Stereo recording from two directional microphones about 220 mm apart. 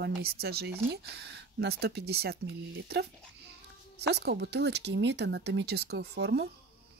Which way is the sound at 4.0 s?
50° right (ahead or behind).